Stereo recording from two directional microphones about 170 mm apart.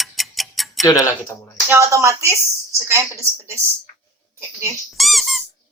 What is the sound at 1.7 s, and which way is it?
A woman's voice, 15° right (ahead or behind).